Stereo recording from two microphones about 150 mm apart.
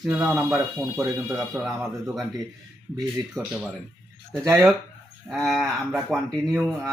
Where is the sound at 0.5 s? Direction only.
15° right (ahead or behind).